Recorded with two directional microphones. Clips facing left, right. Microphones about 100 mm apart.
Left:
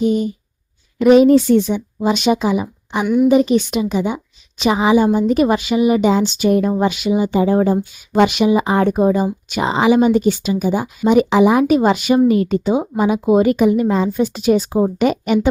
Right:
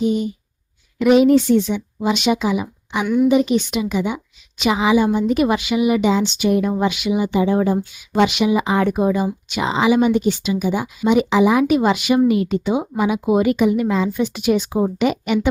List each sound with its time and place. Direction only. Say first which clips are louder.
0.0 s speech: left 3 dB; 45° left (ahead or behind)